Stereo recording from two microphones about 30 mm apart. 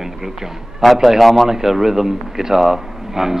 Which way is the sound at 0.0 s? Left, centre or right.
Centre.